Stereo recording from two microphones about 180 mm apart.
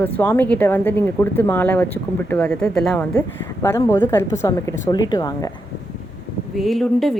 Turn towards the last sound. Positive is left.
turn(degrees=0)  # may be behind; listen again after turning